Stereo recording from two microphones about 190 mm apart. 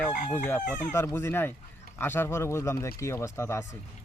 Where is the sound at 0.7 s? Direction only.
10° left (ahead or behind).